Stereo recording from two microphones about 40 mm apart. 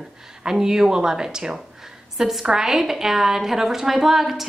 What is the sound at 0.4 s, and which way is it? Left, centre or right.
A woman's voice, centre.